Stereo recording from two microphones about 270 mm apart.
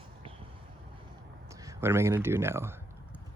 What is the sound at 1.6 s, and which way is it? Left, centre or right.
Speech, centre.